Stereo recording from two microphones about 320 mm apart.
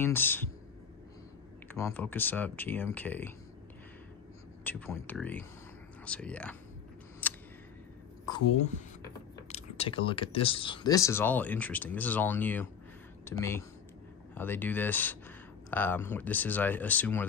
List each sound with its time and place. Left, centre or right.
0.0 s speech: centre
1.7 s speech: centre
4.6 s speech: centre
7.2 s a sound: centre
8.5 s speech: left; by 17.3 s centre